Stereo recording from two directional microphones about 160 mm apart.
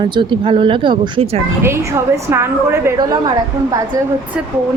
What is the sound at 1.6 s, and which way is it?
A woman's voice, 15° right (ahead or behind).